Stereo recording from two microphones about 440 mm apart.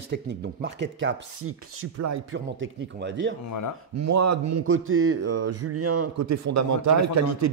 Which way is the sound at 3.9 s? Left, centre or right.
Right.